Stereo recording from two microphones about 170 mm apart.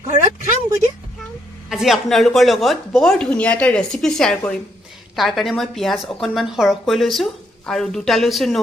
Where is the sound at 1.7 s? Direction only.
Centre (ahead or behind).